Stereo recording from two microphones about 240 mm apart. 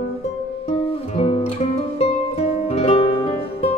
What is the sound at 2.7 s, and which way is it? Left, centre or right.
Music, left.